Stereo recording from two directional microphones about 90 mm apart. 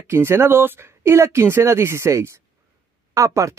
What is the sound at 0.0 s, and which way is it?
Speech, 30° right (ahead or behind).